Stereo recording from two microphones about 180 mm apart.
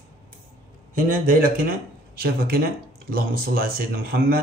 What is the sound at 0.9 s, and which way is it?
Speech, 50° right (ahead or behind).